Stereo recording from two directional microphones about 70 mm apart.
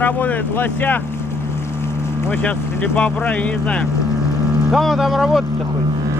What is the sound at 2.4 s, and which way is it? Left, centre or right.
Speech, left.